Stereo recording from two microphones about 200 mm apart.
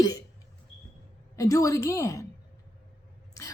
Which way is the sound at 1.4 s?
15° left (ahead or behind).